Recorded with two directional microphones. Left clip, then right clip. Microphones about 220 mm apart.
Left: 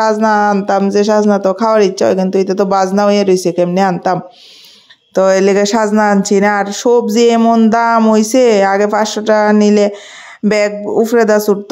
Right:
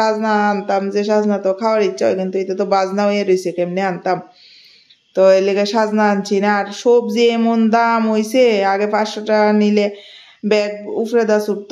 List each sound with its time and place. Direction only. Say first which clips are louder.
0.0 s speech: left 5 dB; 40° left (ahead or behind)